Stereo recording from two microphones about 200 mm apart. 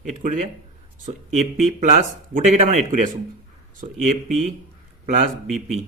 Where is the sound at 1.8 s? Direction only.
40° right (ahead or behind).